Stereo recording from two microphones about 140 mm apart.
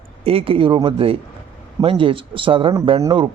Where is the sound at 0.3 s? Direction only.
40° right (ahead or behind).